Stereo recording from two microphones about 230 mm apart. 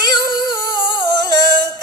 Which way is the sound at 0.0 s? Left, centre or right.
Centre.